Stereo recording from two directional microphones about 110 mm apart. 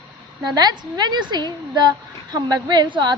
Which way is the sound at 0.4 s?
40° right (ahead or behind).